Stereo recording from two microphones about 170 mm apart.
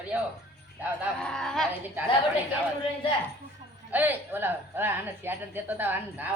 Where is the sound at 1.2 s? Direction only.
5° left (ahead or behind).